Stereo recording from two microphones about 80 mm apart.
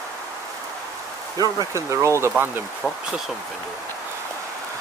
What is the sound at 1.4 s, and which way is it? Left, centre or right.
Speech, right.